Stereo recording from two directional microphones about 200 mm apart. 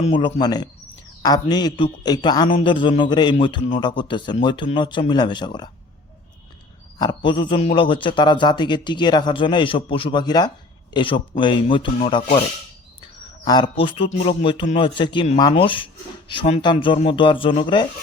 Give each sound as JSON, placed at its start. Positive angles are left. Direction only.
{"t": 0.0, "sound": "a man's voice", "side_deg": 25}
{"t": 7.0, "sound": "a man's voice", "side_deg": 20}